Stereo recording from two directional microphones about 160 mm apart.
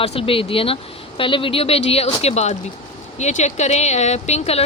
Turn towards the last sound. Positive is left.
turn(degrees=40)  # may be behind; listen again after turning